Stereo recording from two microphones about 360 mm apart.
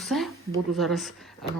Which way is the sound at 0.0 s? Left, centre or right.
Centre.